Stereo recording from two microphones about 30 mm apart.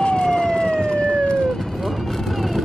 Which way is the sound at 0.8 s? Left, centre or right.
Left.